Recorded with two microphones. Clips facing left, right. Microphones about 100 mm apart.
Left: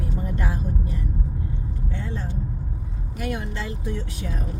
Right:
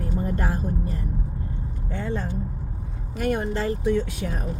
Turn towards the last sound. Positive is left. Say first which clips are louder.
# right 7 dB
turn(degrees=-65)  # may be behind; listen again after turning